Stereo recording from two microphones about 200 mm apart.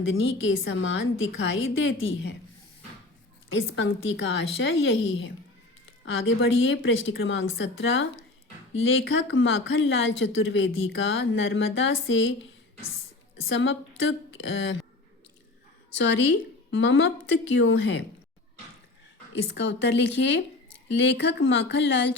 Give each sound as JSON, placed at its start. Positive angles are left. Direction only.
{"t": 0.0, "sound": "a woman's voice", "side_deg": 75}
{"t": 3.5, "sound": "a woman's voice", "side_deg": 65}
{"t": 6.1, "sound": "a woman's voice", "side_deg": 70}
{"t": 13.5, "sound": "a woman's voice", "side_deg": 70}
{"t": 16.7, "sound": "a woman's voice", "side_deg": 65}
{"t": 19.5, "sound": "a woman's voice", "side_deg": 60}